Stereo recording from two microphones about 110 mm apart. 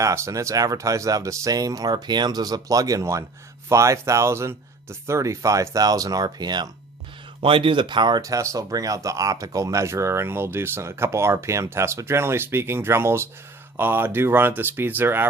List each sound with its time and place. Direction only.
0.0 s speech: 30° right (ahead or behind)
7.4 s speech: 50° right (ahead or behind); by 15.3 s 20° right (ahead or behind)